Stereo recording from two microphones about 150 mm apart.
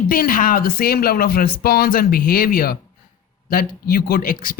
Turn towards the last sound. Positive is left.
turn(degrees=70)  # may be behind; listen again after turning